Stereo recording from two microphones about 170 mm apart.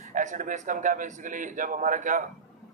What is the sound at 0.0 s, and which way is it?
A man's voice, 45° right (ahead or behind).